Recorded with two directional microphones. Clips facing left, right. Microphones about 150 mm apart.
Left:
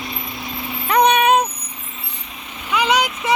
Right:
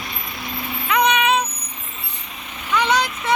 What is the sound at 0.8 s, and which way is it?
Vehicle, 40° left (ahead or behind).